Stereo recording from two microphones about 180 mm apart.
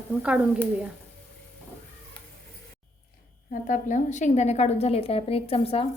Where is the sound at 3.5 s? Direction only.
45° left (ahead or behind).